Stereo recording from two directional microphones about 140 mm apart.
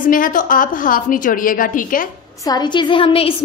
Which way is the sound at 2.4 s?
30° left (ahead or behind).